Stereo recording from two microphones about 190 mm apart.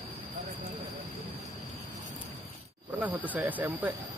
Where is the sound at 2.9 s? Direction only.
10° right (ahead or behind).